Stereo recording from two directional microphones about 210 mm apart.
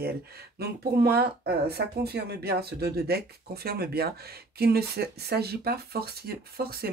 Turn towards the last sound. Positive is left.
turn(degrees=-45)  # may be behind; listen again after turning